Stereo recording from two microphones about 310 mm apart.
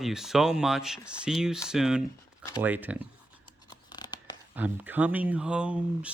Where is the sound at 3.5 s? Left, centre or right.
Centre.